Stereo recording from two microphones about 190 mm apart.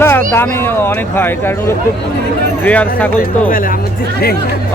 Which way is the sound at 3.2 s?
45° left (ahead or behind).